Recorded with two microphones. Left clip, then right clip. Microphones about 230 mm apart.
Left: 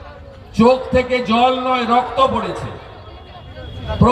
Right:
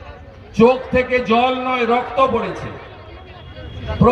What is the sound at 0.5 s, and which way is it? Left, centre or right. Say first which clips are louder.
A man's voice: even; right.